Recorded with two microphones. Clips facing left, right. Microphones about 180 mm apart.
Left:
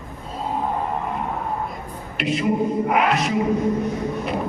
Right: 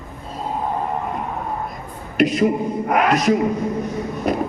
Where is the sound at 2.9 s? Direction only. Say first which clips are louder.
Right 8 dB; 40° right (ahead or behind).